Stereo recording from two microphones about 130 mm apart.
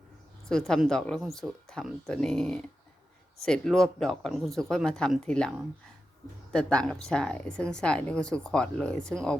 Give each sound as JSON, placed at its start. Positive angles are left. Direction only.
{"t": 0.4, "sound": "a woman's voice", "side_deg": 5}